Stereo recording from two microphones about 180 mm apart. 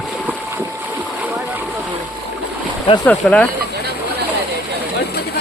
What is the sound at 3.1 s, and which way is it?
Speech, 5° left (ahead or behind).